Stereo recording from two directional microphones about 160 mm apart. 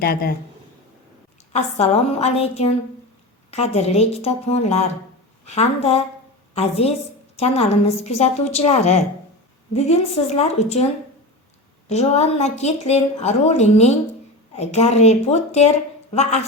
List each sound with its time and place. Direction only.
0.0 s speech: 70° left (ahead or behind)
1.5 s a woman's voice: 45° left (ahead or behind)
11.9 s speech: 40° left (ahead or behind)